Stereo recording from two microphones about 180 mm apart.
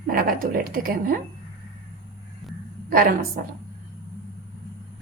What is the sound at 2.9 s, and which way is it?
Speech, 55° right (ahead or behind).